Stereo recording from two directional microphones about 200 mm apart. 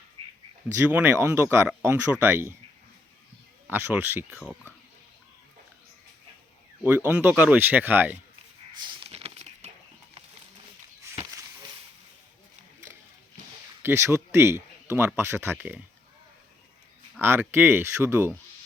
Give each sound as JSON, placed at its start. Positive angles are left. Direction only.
{"t": 0.8, "sound": "speech", "side_deg": -10}
{"t": 3.7, "sound": "speech", "side_deg": -10}
{"t": 4.4, "sound": "speech", "side_deg": 10}
{"t": 6.8, "sound": "speech", "side_deg": -10}
{"t": 8.8, "sound": "a sound", "side_deg": -25}
{"t": 11.1, "sound": "a sound", "side_deg": -15}
{"t": 13.8, "sound": "speech", "side_deg": -15}
{"t": 17.2, "sound": "speech", "side_deg": -10}